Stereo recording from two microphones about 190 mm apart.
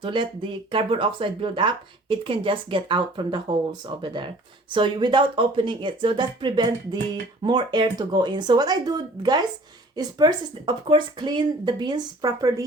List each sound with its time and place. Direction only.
0.0 s speech: 25° right (ahead or behind)